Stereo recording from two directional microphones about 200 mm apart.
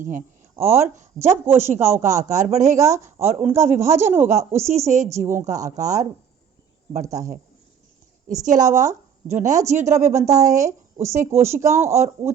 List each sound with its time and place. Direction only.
0.0 s speech: 40° right (ahead or behind)
0.5 s speech: 10° right (ahead or behind)
0.8 s speech: 35° right (ahead or behind)
1.3 s speech: 10° right (ahead or behind)
1.6 s speech: 35° right (ahead or behind)
2.7 s speech: 15° right (ahead or behind)
3.2 s speech: 30° right (ahead or behind)
3.5 s speech: 15° right (ahead or behind)
5.4 s speech: 35° right (ahead or behind)
7.0 s speech: 15° right (ahead or behind)
8.3 s speech: 35° right (ahead or behind)
10.1 s speech: 15° right (ahead or behind)